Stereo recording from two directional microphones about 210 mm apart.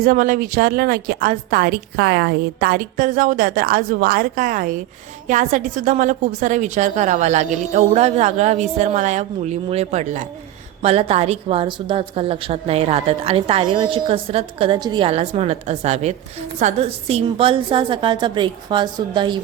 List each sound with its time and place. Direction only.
0.0 s a woman's voice: 40° right (ahead or behind); by 19.4 s 20° right (ahead or behind)